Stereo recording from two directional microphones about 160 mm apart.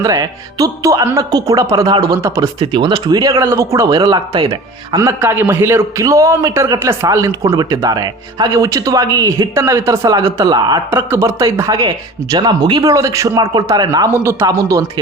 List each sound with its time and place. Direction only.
0.0 s a man's voice: 20° right (ahead or behind)
2.6 s a man's voice: 30° right (ahead or behind)
5.0 s a man's voice: 15° right (ahead or behind)